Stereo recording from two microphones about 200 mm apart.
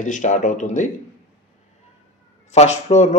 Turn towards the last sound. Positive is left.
turn(degrees=35)  # may be behind; listen again after turning